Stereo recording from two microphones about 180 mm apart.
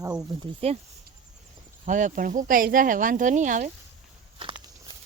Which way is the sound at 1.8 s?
45° right (ahead or behind).